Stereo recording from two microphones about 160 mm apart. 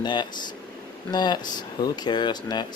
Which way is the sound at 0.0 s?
30° left (ahead or behind).